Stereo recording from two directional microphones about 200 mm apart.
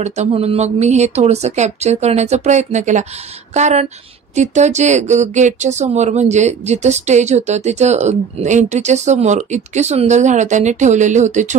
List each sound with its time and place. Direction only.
0.0 s speech: 35° right (ahead or behind)